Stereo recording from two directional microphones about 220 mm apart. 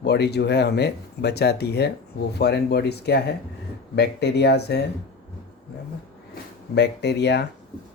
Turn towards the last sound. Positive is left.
turn(degrees=50)  # may be behind; listen again after turning